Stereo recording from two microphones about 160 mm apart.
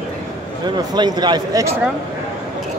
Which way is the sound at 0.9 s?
25° right (ahead or behind).